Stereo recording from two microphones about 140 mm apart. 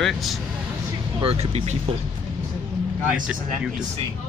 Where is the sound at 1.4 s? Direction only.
50° right (ahead or behind).